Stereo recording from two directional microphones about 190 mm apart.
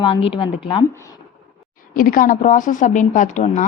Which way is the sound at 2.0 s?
45° left (ahead or behind).